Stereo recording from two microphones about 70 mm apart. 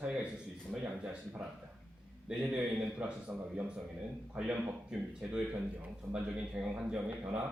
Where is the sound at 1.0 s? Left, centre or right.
Centre.